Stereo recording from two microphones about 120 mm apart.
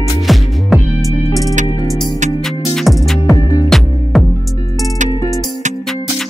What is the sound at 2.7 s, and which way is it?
Music, centre (ahead or behind).